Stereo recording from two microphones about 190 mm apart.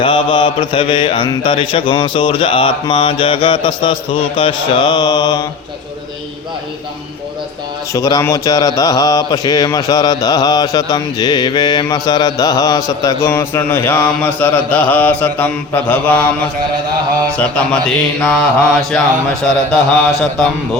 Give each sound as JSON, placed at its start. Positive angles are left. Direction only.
{"t": 0.0, "sound": "speech", "side_deg": 25}
{"t": 7.9, "sound": "speech", "side_deg": 20}
{"t": 13.2, "sound": "mantra", "side_deg": 10}